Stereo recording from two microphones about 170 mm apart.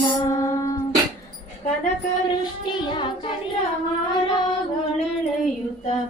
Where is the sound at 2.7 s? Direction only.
30° left (ahead or behind).